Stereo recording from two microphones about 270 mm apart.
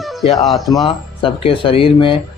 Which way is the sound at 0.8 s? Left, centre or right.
Centre.